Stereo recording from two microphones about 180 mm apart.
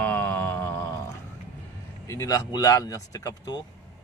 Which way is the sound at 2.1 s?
20° left (ahead or behind).